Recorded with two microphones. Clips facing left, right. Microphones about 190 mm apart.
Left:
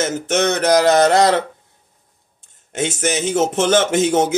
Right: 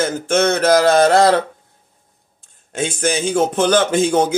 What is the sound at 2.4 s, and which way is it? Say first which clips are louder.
Speech: even; 20° left (ahead or behind).